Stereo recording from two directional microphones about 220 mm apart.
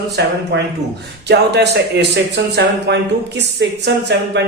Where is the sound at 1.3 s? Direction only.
50° right (ahead or behind).